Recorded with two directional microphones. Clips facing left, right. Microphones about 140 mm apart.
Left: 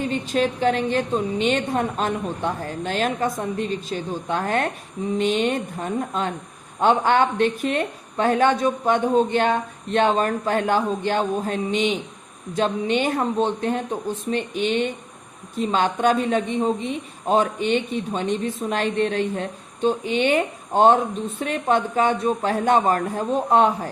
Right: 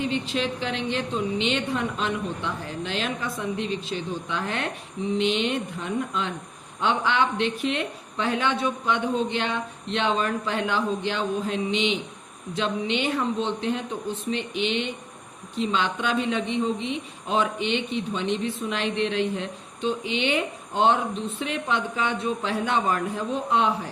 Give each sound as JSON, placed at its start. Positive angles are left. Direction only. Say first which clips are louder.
{"t": 0.0, "sound": "speech", "louder": "left 4 dB", "side_deg": 45}